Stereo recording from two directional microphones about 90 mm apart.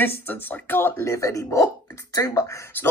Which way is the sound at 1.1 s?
35° left (ahead or behind).